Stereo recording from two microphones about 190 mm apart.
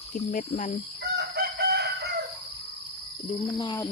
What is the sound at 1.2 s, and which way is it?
Chicken, 60° right (ahead or behind).